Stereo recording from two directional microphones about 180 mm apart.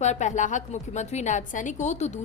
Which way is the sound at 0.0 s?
40° left (ahead or behind).